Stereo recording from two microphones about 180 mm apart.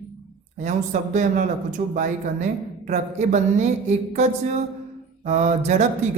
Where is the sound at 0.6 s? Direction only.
40° right (ahead or behind).